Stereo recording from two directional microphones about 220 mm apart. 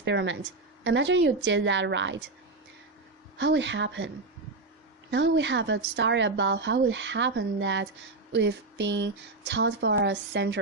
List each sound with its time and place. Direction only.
0.0 s speech: 55° right (ahead or behind)
3.3 s speech: 55° right (ahead or behind)
5.1 s speech: 55° right (ahead or behind)